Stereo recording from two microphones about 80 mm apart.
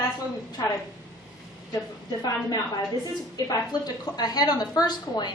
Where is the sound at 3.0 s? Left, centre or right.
Left.